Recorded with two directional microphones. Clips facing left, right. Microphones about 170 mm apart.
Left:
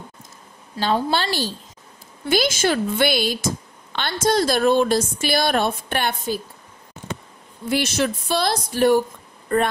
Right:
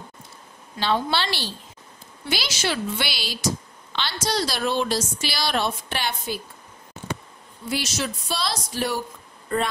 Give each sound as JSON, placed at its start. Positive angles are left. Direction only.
{"t": 0.7, "sound": "a woman's voice", "side_deg": 40}
{"t": 7.7, "sound": "speech", "side_deg": 55}